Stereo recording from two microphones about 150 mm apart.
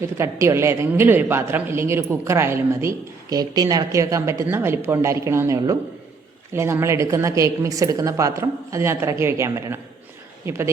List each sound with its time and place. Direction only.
0.2 s a man's voice: 20° right (ahead or behind)